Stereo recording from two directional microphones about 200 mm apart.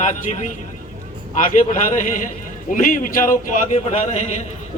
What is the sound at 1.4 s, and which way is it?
Speech, 40° left (ahead or behind).